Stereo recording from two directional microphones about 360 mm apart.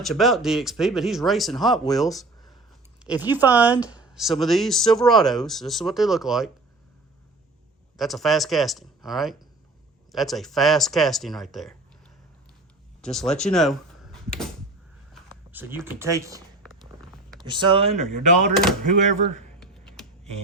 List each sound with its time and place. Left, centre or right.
0.0 s speech: centre
7.9 s speech: centre
13.0 s speech: centre
15.5 s speech: centre
17.4 s speech: centre
18.1 s speech: right
19.5 s typing: centre